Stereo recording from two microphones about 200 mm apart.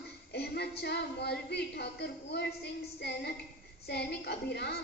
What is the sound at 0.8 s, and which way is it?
A woman's voice, 55° left (ahead or behind).